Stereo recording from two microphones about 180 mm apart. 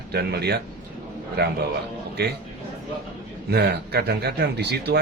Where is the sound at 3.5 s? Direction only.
65° right (ahead or behind).